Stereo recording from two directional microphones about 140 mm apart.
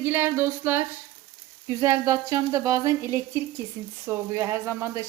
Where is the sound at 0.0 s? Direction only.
15° right (ahead or behind).